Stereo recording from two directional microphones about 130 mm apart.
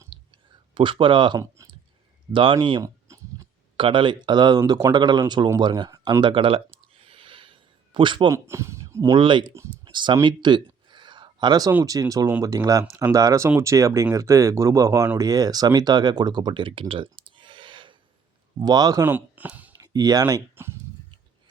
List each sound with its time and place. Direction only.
0.0 s clicking: 35° right (ahead or behind)
1.6 s clicking: 25° right (ahead or behind)
2.3 s speech: 40° right (ahead or behind)
2.8 s a sound: 25° right (ahead or behind)
3.8 s speech: 40° right (ahead or behind)
5.5 s a sound: 35° right (ahead or behind)
8.3 s speech: 20° right (ahead or behind)
9.1 s speech: 40° right (ahead or behind)
10.2 s a sound: 35° right (ahead or behind)
11.9 s speech: 25° right (ahead or behind)
16.9 s clicking: 40° right (ahead or behind)
18.6 s speech: 30° right (ahead or behind)
19.0 s speech: 15° right (ahead or behind)
19.7 s speech: 30° right (ahead or behind)